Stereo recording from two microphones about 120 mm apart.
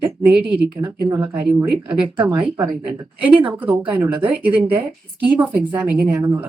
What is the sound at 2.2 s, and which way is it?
Speech, 35° right (ahead or behind).